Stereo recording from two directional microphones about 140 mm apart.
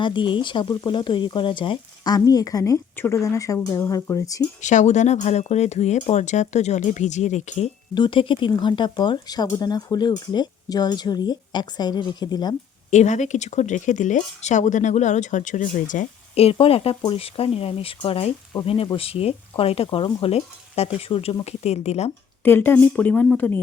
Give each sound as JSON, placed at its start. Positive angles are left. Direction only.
{"t": 0.0, "sound": "speech", "side_deg": 35}
{"t": 4.6, "sound": "speech", "side_deg": 60}
{"t": 7.9, "sound": "speech", "side_deg": 35}
{"t": 12.9, "sound": "speech", "side_deg": 55}
{"t": 16.3, "sound": "speech", "side_deg": 45}
{"t": 22.4, "sound": "a woman's voice", "side_deg": 15}